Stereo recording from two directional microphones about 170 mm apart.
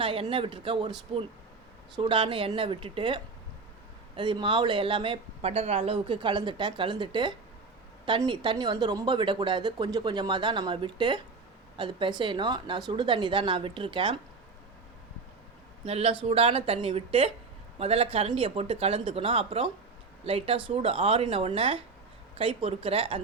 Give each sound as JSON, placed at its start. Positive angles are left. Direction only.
{"t": 0.0, "sound": "speech", "side_deg": -30}
{"t": 15.9, "sound": "speech", "side_deg": -35}